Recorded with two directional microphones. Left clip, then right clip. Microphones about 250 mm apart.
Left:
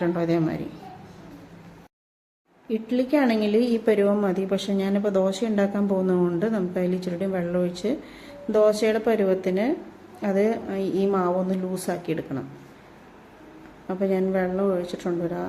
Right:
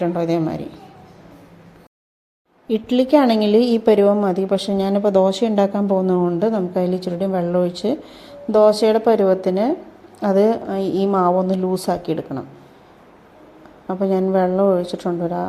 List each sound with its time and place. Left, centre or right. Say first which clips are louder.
0.0 s a woman's voice: right 4 dB; centre
2.6 s a woman's voice: right 7 dB; right
13.8 s a woman's voice: right 5 dB; centre